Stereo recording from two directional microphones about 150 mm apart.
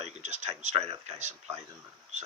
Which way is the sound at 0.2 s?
50° right (ahead or behind).